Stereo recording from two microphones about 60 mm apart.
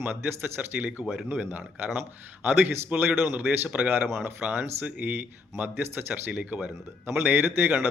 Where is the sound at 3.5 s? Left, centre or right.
Right.